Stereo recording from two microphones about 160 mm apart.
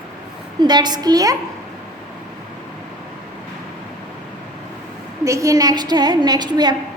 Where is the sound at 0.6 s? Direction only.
25° right (ahead or behind).